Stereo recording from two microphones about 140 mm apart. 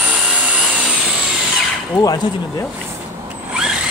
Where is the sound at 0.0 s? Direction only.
5° right (ahead or behind).